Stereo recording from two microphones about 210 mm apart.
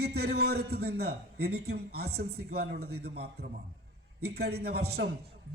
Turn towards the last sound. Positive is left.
turn(degrees=-50)  # may be behind; listen again after turning